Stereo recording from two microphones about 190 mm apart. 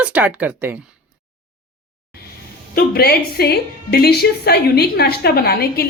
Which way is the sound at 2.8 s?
50° left (ahead or behind).